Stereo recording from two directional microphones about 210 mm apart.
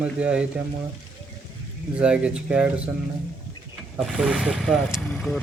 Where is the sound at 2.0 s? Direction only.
5° right (ahead or behind).